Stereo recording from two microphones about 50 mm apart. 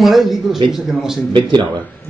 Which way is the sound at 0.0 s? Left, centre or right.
Centre.